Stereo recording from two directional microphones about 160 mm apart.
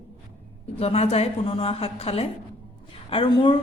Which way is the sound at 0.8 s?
40° left (ahead or behind).